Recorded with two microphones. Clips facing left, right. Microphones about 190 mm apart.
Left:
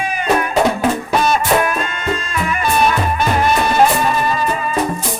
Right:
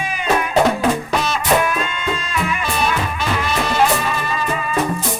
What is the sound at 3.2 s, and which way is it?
Music, 50° left (ahead or behind).